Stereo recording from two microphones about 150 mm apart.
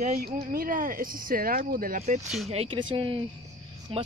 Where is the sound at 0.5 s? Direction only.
70° right (ahead or behind).